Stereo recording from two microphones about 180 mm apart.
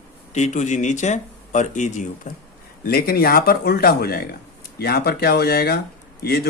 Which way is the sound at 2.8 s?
55° left (ahead or behind).